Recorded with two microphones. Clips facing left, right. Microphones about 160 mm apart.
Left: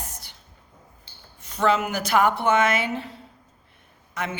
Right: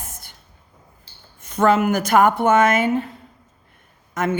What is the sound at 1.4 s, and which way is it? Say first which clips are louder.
A man's voice: right 5 dB; 50° right (ahead or behind).